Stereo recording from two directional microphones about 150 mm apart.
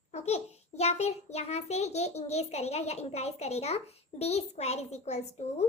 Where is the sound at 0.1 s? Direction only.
45° left (ahead or behind).